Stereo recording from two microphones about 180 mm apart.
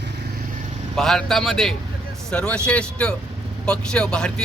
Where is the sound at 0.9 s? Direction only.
Centre (ahead or behind).